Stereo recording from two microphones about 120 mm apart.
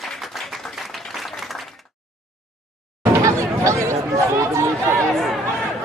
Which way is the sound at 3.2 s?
25° right (ahead or behind).